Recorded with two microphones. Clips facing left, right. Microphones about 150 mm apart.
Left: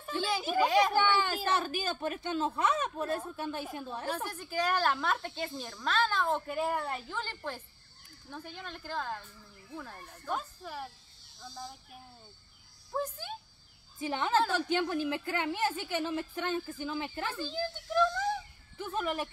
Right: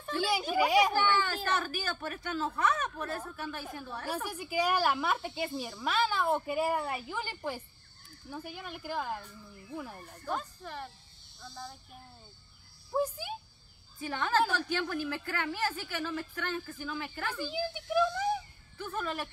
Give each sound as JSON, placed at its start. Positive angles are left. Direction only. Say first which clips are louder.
{"t": 0.6, "sound": "speech", "louder": "even", "side_deg": -10}
{"t": 0.9, "sound": "a woman's voice", "louder": "left 1 dB", "side_deg": 20}
{"t": 4.1, "sound": "speech", "louder": "right 3 dB", "side_deg": -10}
{"t": 10.3, "sound": "speech", "louder": "even", "side_deg": 5}
{"t": 12.9, "sound": "speech", "louder": "right 4 dB", "side_deg": -10}
{"t": 13.9, "sound": "a woman's voice", "louder": "left 1 dB", "side_deg": 20}
{"t": 17.3, "sound": "speech", "louder": "right 1 dB", "side_deg": -15}
{"t": 18.8, "sound": "a woman's voice", "louder": "left 2 dB", "side_deg": 20}